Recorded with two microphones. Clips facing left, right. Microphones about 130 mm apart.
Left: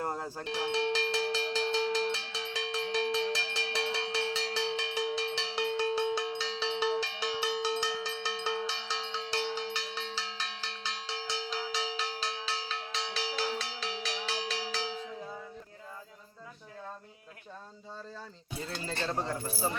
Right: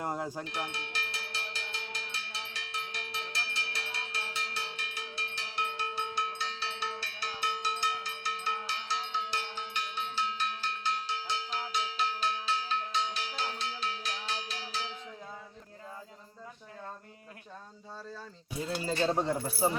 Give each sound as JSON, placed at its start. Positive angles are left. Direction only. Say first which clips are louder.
{"t": 0.0, "sound": "cowbell", "louder": "right 1 dB", "side_deg": -15}
{"t": 0.4, "sound": "cowbell", "louder": "left 8 dB", "side_deg": 90}
{"t": 18.7, "sound": "keys jangling", "louder": "right 6 dB", "side_deg": -10}